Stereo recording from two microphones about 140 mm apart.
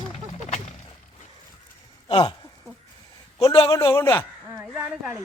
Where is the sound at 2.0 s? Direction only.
40° left (ahead or behind).